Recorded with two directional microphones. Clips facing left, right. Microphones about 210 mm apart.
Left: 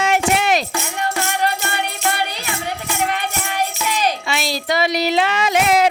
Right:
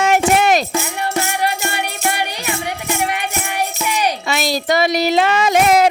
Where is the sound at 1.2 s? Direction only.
10° right (ahead or behind).